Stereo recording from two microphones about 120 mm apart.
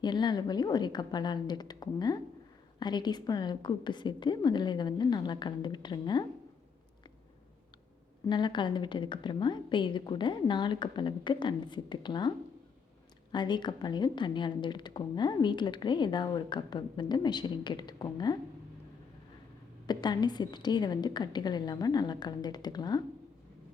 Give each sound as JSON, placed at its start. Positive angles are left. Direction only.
{"t": 0.0, "sound": "a woman's voice", "side_deg": 35}
{"t": 8.3, "sound": "a woman's voice", "side_deg": 40}
{"t": 13.3, "sound": "a woman's voice", "side_deg": 40}
{"t": 19.9, "sound": "a woman's voice", "side_deg": 35}